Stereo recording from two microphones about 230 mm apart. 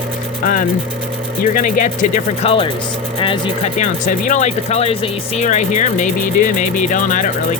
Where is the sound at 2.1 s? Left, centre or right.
Left.